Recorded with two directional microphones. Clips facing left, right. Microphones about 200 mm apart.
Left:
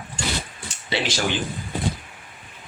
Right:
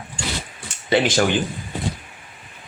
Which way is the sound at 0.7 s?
55° right (ahead or behind).